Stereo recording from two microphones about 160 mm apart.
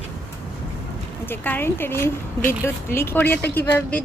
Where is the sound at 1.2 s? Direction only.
10° left (ahead or behind).